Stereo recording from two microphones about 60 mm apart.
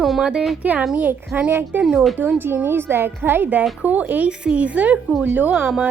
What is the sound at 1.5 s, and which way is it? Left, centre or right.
Speech, right.